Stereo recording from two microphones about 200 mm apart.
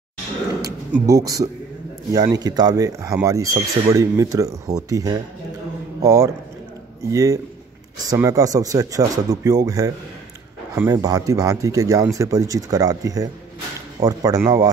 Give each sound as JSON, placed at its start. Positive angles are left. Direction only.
{"t": 0.6, "sound": "speech", "side_deg": -15}